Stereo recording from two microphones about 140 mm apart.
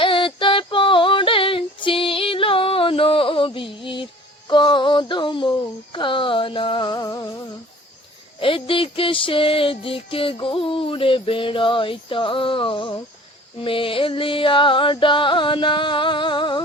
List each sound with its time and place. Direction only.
0.0 s female singing: 40° left (ahead or behind)
8.4 s music: 40° left (ahead or behind)